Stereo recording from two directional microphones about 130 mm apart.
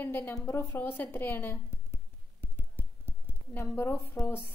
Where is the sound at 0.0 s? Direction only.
15° left (ahead or behind).